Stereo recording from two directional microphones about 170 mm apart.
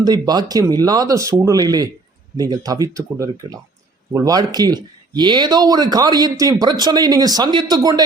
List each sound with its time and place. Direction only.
0.0 s speech: 25° right (ahead or behind)